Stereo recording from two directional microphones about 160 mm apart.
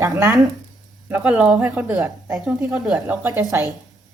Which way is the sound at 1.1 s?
10° right (ahead or behind).